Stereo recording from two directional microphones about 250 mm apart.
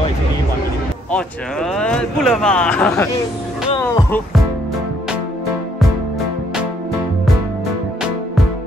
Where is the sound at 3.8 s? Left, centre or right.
Centre.